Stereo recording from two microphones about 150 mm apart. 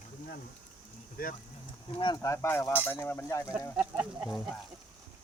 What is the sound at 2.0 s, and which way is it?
Speech, 30° left (ahead or behind).